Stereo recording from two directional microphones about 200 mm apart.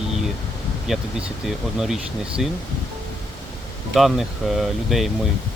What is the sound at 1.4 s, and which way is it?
Speech, centre (ahead or behind).